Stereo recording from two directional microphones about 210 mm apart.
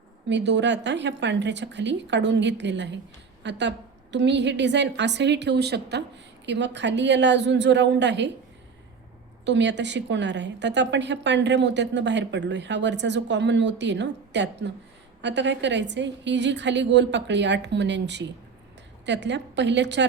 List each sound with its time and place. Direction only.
0.3 s a woman's voice: 55° right (ahead or behind)
9.4 s a woman's voice: 55° right (ahead or behind)